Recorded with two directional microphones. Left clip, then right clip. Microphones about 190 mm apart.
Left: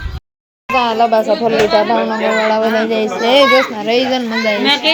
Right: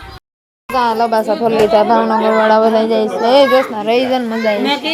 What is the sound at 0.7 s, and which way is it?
A child's voice, 5° left (ahead or behind).